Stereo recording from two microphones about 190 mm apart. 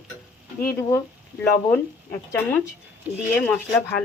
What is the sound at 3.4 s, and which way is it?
Frying, 10° left (ahead or behind).